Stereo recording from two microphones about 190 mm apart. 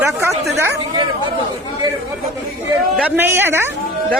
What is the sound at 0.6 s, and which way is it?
Speech, 15° right (ahead or behind).